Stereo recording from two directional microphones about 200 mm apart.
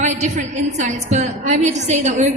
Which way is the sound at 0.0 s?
35° right (ahead or behind).